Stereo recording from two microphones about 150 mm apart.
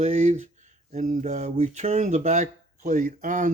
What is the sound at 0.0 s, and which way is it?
Speech, 50° right (ahead or behind).